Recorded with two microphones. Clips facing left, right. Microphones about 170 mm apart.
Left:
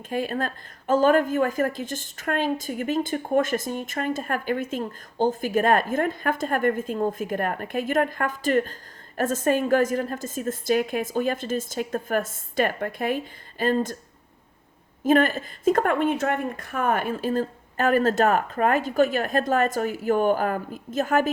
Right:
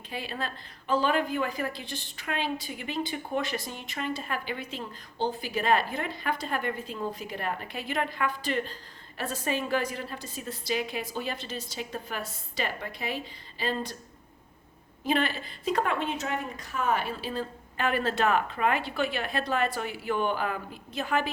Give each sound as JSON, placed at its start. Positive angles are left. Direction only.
{"t": 0.1, "sound": "a woman's voice", "side_deg": 45}
{"t": 15.0, "sound": "a woman's voice", "side_deg": 45}